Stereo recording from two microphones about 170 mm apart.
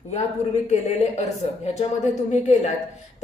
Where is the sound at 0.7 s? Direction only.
40° left (ahead or behind).